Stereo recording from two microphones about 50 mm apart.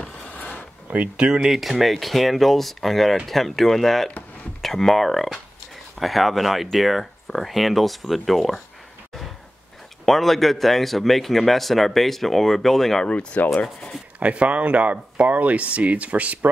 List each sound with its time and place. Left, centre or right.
0.3 s a sound: left
0.8 s speech: right; by 8.5 s centre
10.0 s speech: centre
13.0 s speech: left
14.2 s speech: right